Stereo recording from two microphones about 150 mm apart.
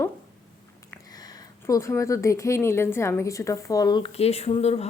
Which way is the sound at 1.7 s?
20° left (ahead or behind).